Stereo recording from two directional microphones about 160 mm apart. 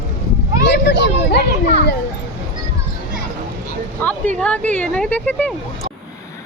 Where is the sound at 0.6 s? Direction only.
90° left.